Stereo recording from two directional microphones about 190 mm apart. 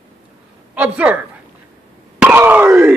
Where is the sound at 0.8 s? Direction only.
10° right (ahead or behind).